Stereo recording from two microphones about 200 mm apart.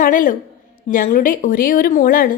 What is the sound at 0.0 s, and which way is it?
A woman's voice, 40° left (ahead or behind).